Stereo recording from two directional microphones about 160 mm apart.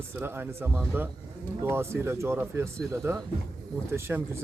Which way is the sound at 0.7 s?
Centre (ahead or behind).